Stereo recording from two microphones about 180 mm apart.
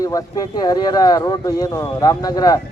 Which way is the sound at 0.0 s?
20° left (ahead or behind).